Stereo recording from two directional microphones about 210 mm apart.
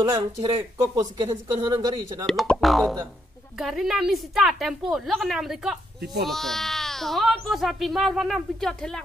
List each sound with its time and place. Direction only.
0.0 s speech: 15° right (ahead or behind)
2.2 s speech: centre (ahead or behind)